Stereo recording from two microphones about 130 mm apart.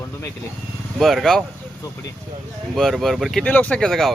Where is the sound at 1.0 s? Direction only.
Centre (ahead or behind).